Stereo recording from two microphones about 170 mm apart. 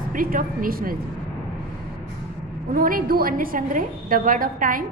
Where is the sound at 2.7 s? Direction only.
55° right (ahead or behind).